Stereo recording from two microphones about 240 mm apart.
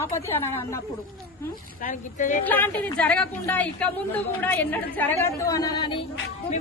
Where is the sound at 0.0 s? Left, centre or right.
Centre.